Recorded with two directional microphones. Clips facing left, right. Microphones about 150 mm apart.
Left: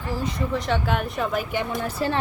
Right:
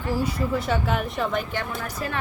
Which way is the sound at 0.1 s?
10° right (ahead or behind).